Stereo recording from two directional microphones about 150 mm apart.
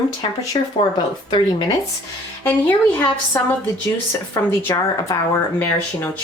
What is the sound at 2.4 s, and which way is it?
A woman's voice, 15° left (ahead or behind).